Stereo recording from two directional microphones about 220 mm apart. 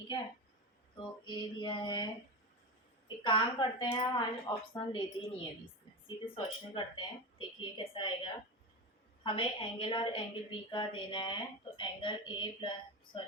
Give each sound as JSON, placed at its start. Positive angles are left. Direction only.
{"t": 1.2, "sound": "a woman's voice", "side_deg": 20}
{"t": 3.2, "sound": "a woman's voice", "side_deg": 20}